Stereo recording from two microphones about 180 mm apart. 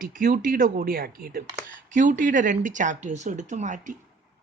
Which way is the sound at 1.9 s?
45° right (ahead or behind).